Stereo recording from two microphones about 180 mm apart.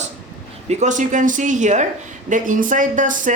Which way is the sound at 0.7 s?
40° right (ahead or behind).